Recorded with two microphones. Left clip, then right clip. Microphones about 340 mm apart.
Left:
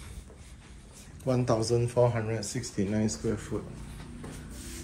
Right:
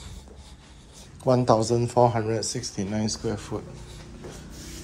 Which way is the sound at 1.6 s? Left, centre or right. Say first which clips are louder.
Right 5 dB; centre.